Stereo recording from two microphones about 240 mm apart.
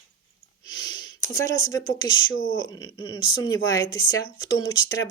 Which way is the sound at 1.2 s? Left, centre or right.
Centre.